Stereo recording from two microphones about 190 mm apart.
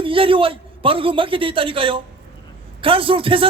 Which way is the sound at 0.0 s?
30° right (ahead or behind).